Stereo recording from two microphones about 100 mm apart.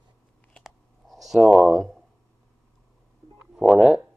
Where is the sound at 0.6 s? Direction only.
Centre (ahead or behind).